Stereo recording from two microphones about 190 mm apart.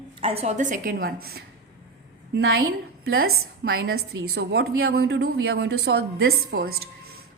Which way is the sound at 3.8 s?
75° right (ahead or behind).